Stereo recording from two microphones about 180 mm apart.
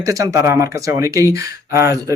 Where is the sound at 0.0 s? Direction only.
20° right (ahead or behind).